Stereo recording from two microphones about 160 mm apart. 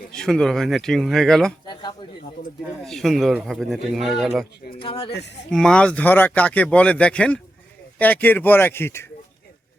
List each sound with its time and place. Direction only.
0.1 s speech: 5° left (ahead or behind)
1.6 s a sound: 25° left (ahead or behind)
2.8 s speech: centre (ahead or behind)
4.8 s speech: 35° left (ahead or behind)
5.5 s speech: 5° left (ahead or behind)